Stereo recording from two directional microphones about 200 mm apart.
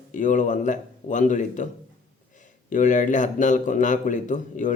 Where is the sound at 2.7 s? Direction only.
40° left (ahead or behind).